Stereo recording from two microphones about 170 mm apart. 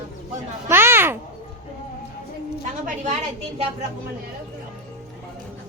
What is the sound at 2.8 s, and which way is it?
Speech, 45° right (ahead or behind).